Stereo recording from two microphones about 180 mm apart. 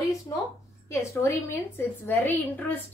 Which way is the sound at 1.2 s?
15° left (ahead or behind).